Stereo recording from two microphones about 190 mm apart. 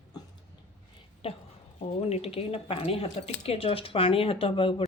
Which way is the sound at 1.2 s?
30° left (ahead or behind).